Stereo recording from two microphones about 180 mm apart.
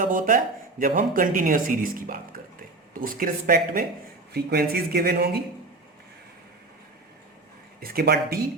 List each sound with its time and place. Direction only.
0.0 s speech: 50° right (ahead or behind)
7.8 s speech: 60° right (ahead or behind)